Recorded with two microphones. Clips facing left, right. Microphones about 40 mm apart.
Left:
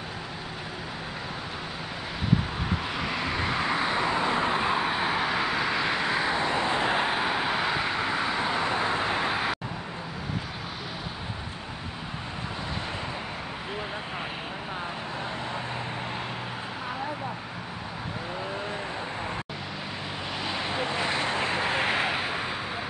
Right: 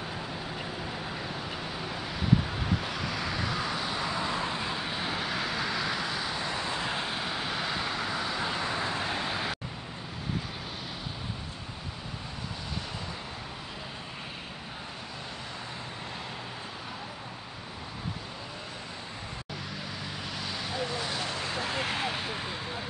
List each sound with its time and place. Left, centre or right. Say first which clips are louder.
2.9 s vehicle: left 3 dB; left
9.0 s vehicle: left 5 dB; left
20.4 s vehicle: left 4 dB; left